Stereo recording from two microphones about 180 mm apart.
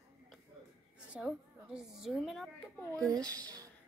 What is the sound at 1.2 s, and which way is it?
Speech, 5° right (ahead or behind).